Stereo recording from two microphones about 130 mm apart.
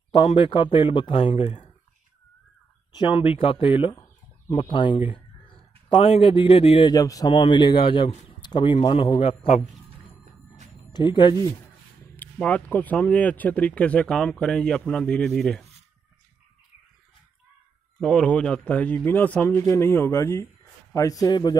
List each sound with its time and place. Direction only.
0.1 s speech: 45° left (ahead or behind); by 1.7 s 60° left (ahead or behind)
2.9 s a man's voice: 40° left (ahead or behind)
6.9 s a man's voice: 25° left (ahead or behind); by 9.6 s 45° left (ahead or behind)
10.9 s speech: 35° left (ahead or behind)
12.2 s speech: 10° left (ahead or behind)
17.9 s speech: 5° left (ahead or behind); by 21.5 s 35° left (ahead or behind)